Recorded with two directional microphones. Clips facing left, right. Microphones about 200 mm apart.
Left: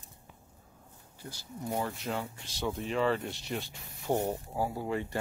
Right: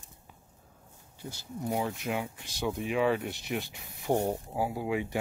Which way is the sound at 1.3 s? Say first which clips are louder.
Right 3 dB; 20° right (ahead or behind).